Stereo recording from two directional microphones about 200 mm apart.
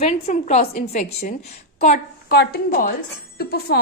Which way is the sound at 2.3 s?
50° left (ahead or behind).